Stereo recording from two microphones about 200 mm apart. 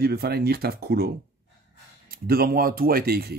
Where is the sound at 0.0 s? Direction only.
50° right (ahead or behind).